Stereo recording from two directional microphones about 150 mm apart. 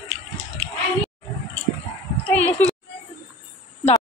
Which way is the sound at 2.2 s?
10° left (ahead or behind).